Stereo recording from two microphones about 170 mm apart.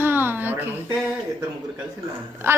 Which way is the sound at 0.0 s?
10° right (ahead or behind).